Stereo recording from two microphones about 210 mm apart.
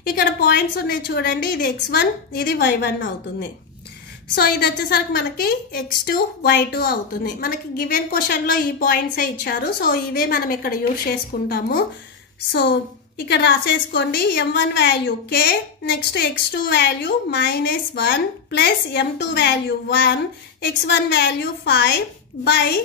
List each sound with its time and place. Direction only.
0.0 s a woman's voice: 45° left (ahead or behind)
13.3 s a woman's voice: 55° left (ahead or behind)